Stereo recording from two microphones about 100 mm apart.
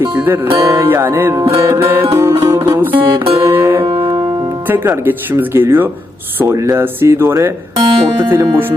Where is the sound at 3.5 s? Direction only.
25° right (ahead or behind).